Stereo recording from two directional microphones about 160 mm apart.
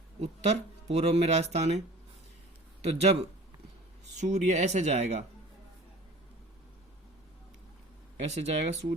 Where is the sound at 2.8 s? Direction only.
40° right (ahead or behind).